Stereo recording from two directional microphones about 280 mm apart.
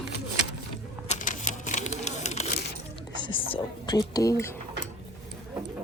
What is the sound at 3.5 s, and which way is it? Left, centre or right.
Whispering, centre.